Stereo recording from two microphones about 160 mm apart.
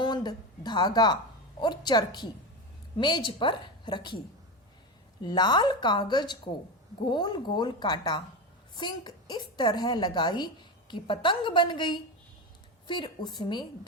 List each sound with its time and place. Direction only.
0.0 s a woman's voice: 25° left (ahead or behind)
5.2 s a woman's voice: 25° left (ahead or behind)